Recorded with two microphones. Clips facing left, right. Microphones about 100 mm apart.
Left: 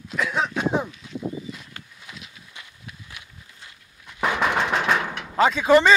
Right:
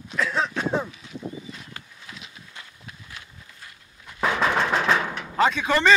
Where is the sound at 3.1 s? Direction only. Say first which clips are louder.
Right 1 dB; 15° left (ahead or behind).